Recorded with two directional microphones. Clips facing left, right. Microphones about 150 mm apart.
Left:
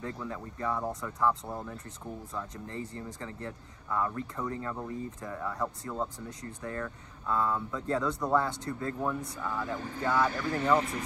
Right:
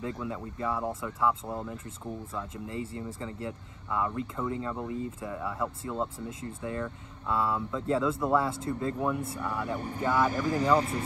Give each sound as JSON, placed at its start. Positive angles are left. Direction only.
{"t": 0.0, "sound": "speech", "side_deg": -15}
{"t": 4.5, "sound": "speech", "side_deg": -20}
{"t": 4.8, "sound": "speech", "side_deg": -10}
{"t": 6.6, "sound": "speech", "side_deg": -15}
{"t": 10.3, "sound": "speech", "side_deg": -40}